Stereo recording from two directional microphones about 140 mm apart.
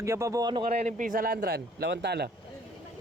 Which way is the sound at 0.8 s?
75° right (ahead or behind).